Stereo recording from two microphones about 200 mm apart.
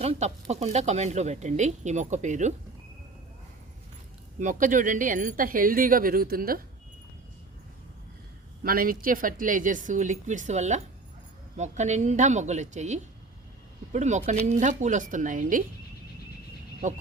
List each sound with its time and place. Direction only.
0.0 s speech: 35° right (ahead or behind)
4.4 s speech: 40° right (ahead or behind)
8.6 s speech: 45° right (ahead or behind)
16.8 s speech: 40° right (ahead or behind)